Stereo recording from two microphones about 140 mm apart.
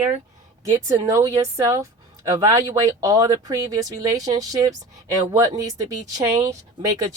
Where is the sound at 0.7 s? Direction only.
25° right (ahead or behind).